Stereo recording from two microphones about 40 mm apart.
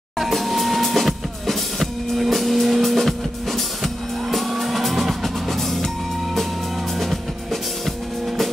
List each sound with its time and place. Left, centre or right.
0.2 s music: centre